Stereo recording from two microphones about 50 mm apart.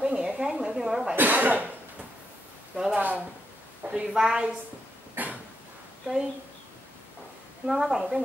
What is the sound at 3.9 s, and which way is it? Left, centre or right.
Speech, centre.